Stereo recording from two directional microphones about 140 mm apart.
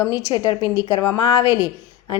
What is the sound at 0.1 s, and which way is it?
A woman's voice, 30° left (ahead or behind).